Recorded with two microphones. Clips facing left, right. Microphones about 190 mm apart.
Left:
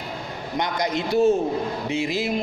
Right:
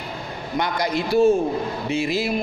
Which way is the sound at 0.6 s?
20° left (ahead or behind).